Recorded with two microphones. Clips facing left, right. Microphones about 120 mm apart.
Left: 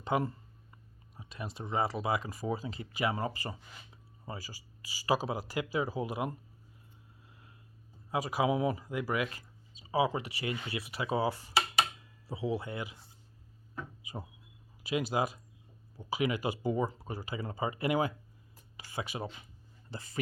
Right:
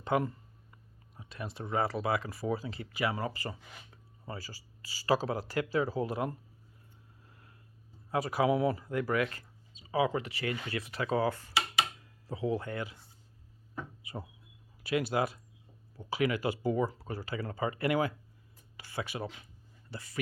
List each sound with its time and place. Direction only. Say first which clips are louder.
0.2 s a sound: even; 30° left (ahead or behind)
1.1 s speech: right 1 dB; 20° left (ahead or behind)
7.3 s a sound: even; 20° left (ahead or behind)
8.1 s speech: right 2 dB; 15° left (ahead or behind)
9.8 s speech: even; 30° left (ahead or behind)
10.2 s speech: right 1 dB; 15° left (ahead or behind)
14.8 s speech: right 1 dB; 15° left (ahead or behind)
19.9 s speech: even; 30° left (ahead or behind)